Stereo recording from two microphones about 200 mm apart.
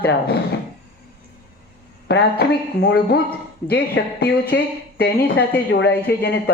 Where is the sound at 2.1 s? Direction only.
60° left (ahead or behind).